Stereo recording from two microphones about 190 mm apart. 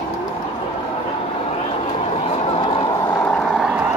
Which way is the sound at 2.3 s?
30° left (ahead or behind).